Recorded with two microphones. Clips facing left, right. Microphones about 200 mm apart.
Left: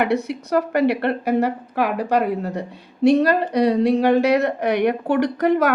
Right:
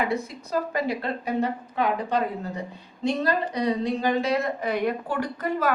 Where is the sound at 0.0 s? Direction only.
75° left (ahead or behind).